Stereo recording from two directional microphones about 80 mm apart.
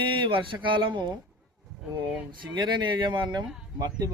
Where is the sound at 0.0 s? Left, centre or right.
Right.